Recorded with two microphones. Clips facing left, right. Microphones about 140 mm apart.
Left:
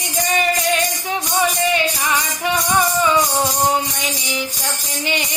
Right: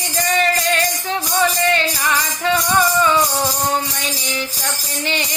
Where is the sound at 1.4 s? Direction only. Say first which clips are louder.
Right 1 dB; 15° left (ahead or behind).